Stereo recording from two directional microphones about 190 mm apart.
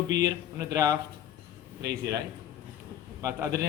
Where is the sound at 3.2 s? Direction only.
15° right (ahead or behind).